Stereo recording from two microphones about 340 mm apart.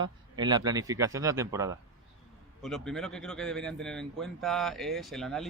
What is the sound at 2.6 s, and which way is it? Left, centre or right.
Speech, centre.